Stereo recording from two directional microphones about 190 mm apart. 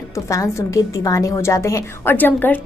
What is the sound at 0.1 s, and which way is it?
A woman's voice, 15° left (ahead or behind).